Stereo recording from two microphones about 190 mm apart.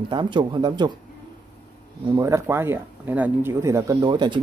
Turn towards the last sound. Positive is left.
turn(degrees=-25)  # may be behind; listen again after turning